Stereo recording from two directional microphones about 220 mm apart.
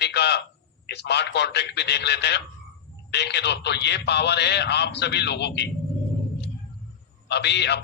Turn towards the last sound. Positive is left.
turn(degrees=50)  # may be behind; listen again after turning